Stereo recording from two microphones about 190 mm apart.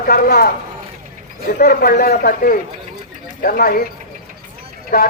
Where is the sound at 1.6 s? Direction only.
50° left (ahead or behind).